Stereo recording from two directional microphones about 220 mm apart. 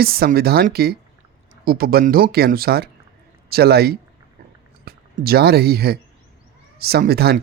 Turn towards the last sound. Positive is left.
turn(degrees=-45)  # may be behind; listen again after turning